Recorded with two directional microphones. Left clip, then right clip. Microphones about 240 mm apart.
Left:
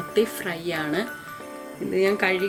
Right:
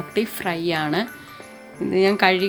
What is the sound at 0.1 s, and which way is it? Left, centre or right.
Speech, right.